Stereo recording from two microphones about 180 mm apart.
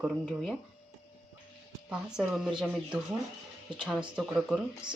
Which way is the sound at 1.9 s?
5° right (ahead or behind).